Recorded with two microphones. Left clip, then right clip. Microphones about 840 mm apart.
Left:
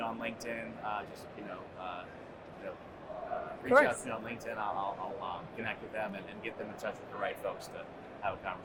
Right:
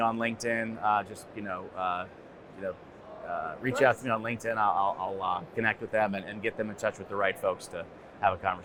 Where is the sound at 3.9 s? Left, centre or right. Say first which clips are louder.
Right 9 dB; right.